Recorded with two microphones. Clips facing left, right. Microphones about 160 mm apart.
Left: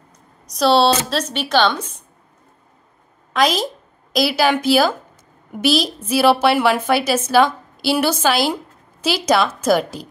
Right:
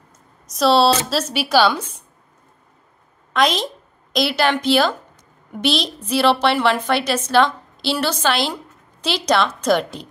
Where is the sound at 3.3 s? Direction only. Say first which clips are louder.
Left 1 dB; 5° left (ahead or behind).